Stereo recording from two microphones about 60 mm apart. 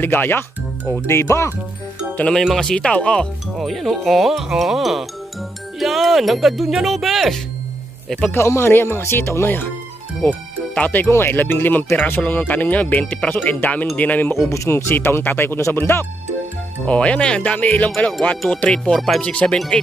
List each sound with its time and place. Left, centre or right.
0.0 s speech: left
1.1 s speech: left
2.4 s speech: centre
2.7 s speech: centre
3.5 s speech: centre
8.4 s speech: left
10.2 s speech: left
11.1 s speech: left
14.5 s speech: left
16.8 s speech: left
18.6 s speech: centre
19.2 s speech: centre